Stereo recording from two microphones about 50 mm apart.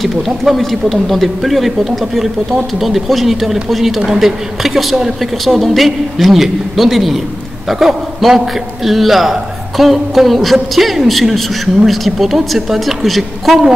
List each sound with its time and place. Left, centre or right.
0.0 s a woman's voice: centre